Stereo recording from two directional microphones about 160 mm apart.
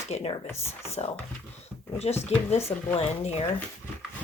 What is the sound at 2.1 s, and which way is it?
Speech, 40° left (ahead or behind).